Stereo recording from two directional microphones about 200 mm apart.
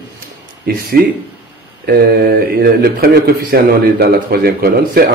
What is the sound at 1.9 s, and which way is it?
Speech, 50° right (ahead or behind).